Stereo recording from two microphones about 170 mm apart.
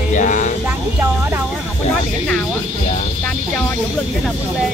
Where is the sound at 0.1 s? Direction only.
50° left (ahead or behind).